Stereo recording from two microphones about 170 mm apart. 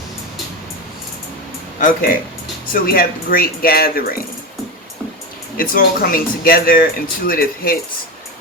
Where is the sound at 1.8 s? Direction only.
50° left (ahead or behind).